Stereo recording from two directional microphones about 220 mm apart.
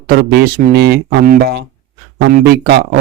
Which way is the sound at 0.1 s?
45° right (ahead or behind).